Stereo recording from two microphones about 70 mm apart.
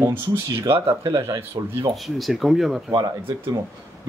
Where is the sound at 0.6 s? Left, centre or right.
Right.